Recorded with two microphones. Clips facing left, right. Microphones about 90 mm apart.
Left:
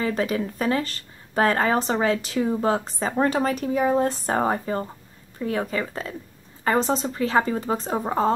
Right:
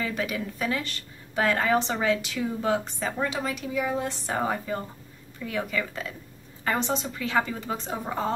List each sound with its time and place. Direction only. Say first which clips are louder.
0.0 s speech: left 5 dB; 35° left (ahead or behind)